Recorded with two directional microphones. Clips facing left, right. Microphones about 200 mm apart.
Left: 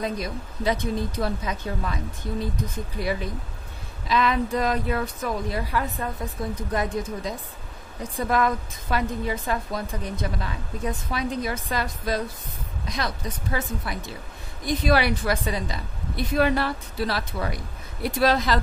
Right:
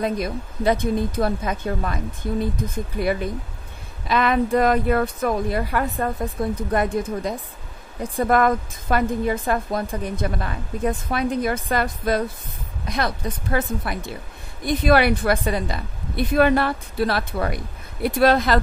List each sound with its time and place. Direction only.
0.0 s a woman's voice: 55° right (ahead or behind)
3.0 s a woman's voice: 55° right (ahead or behind)